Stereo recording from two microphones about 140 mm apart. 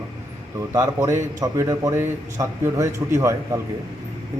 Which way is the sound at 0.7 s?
20° right (ahead or behind).